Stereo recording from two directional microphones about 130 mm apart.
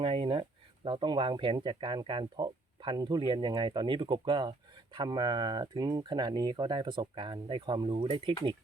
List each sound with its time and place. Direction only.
0.0 s speech: 45° right (ahead or behind)